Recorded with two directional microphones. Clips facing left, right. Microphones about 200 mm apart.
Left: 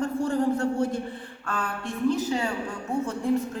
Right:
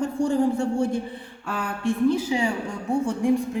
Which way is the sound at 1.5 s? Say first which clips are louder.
Right 5 dB; 10° right (ahead or behind).